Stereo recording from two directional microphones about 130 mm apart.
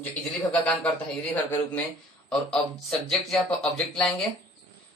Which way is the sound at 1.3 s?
15° left (ahead or behind).